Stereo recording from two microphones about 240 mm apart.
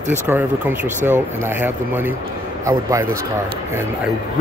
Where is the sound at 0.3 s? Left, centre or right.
Centre.